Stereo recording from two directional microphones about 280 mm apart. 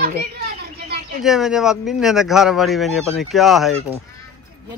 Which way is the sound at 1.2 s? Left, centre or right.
Centre.